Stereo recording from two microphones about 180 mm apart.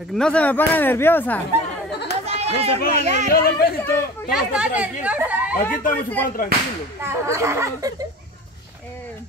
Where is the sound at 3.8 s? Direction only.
10° left (ahead or behind).